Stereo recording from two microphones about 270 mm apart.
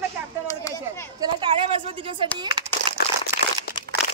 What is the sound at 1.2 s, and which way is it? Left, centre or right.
A woman's voice, centre.